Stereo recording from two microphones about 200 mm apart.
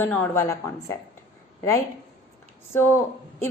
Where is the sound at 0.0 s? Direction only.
15° left (ahead or behind).